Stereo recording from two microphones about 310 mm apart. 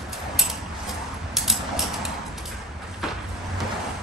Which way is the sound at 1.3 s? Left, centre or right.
Centre.